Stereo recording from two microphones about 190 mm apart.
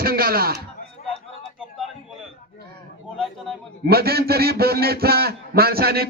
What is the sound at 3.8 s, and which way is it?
A man's voice, 55° right (ahead or behind).